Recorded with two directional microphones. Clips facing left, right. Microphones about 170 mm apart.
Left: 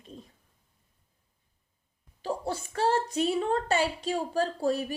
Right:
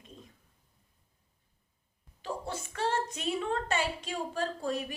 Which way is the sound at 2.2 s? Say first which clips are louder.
Left 5 dB; 35° left (ahead or behind).